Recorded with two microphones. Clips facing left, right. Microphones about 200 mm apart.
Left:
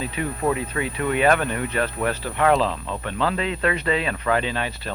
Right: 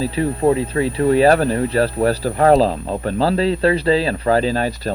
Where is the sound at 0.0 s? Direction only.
30° right (ahead or behind).